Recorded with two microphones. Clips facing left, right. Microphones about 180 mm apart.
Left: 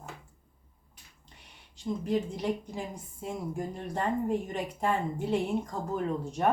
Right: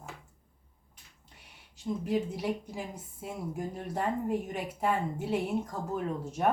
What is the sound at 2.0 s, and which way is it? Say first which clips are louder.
Speech: left 1 dB; 5° right (ahead or behind).